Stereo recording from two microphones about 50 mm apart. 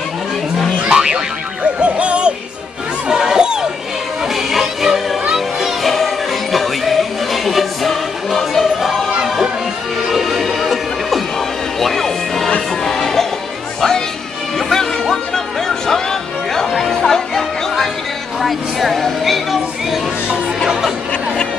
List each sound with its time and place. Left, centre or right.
0.8 s boing: centre
1.6 s music: right
3.1 s a sound: centre
4.2 s music: centre
9.1 s music: centre
18.4 s music: centre